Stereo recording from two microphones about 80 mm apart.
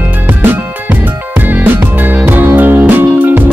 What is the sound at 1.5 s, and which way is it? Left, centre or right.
Music, right.